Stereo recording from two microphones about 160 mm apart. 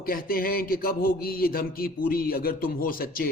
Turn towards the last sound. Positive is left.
turn(degrees=65)  # may be behind; listen again after turning